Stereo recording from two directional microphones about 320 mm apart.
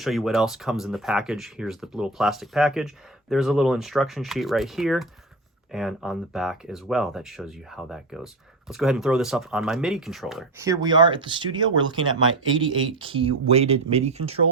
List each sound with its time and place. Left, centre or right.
0.0 s speech: centre